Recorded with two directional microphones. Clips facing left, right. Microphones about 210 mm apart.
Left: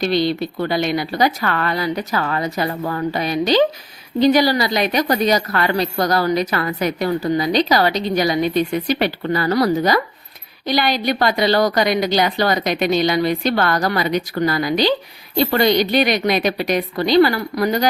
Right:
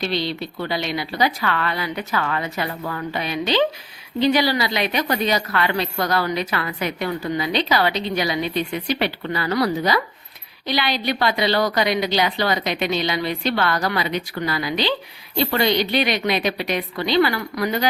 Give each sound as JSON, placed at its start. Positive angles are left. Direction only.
{"t": 0.0, "sound": "a woman's voice", "side_deg": 45}